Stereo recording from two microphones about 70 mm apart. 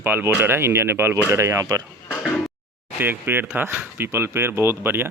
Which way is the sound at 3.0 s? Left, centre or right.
Right.